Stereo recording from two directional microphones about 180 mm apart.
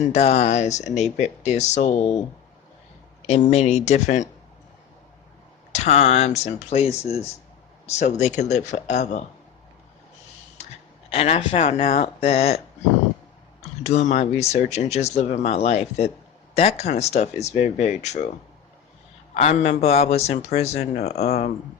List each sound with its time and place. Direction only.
0.1 s speech: 35° left (ahead or behind)
3.5 s speech: 35° left (ahead or behind)
5.7 s speech: 35° left (ahead or behind)
11.1 s speech: 35° left (ahead or behind)
13.6 s speech: 40° left (ahead or behind)
19.3 s speech: 35° left (ahead or behind)